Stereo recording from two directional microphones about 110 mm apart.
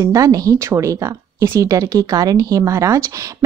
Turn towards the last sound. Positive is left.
turn(degrees=-25)  # may be behind; listen again after turning